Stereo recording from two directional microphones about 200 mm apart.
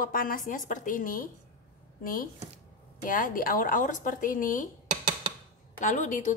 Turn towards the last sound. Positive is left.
turn(degrees=40)  # may be behind; listen again after turning